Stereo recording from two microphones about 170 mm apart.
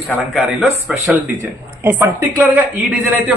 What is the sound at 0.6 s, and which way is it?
Speech, centre (ahead or behind).